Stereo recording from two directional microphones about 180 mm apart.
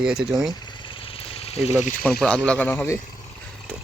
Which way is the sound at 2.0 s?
5° left (ahead or behind).